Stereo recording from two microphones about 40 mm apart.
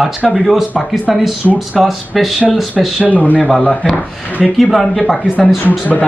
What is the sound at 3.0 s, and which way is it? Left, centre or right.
Speech, left.